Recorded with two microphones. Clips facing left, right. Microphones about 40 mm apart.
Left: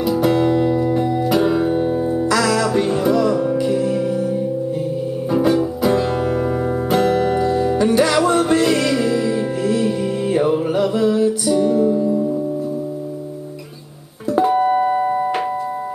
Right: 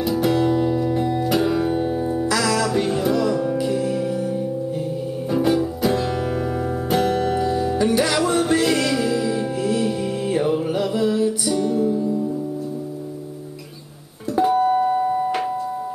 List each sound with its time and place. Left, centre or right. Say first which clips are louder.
0.0 s music: left 3 dB; centre
0.5 s music: left 3 dB; left
0.7 s music: left 3 dB; centre
14.5 s music: even; left